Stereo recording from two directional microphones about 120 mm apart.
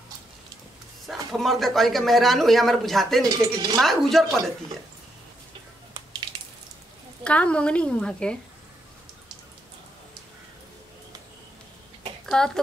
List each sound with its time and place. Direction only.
1.0 s speech: centre (ahead or behind)
3.3 s speech: 35° right (ahead or behind)
3.8 s speech: centre (ahead or behind)
7.2 s a woman's voice: 10° left (ahead or behind)
12.3 s speech: 5° left (ahead or behind)